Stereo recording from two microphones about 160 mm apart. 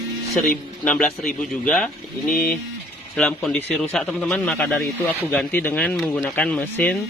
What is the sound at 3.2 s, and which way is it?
Speech, 5° left (ahead or behind).